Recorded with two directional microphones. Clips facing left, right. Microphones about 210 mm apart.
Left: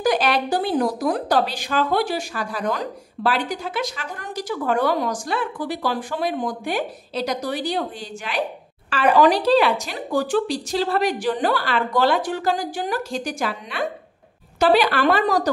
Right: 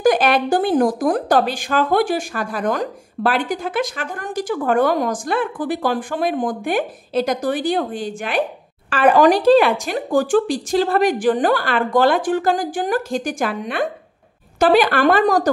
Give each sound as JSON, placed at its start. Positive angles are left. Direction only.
{"t": 0.0, "sound": "speech", "side_deg": -50}